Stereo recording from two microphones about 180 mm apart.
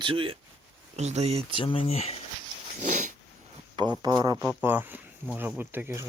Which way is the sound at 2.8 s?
45° right (ahead or behind).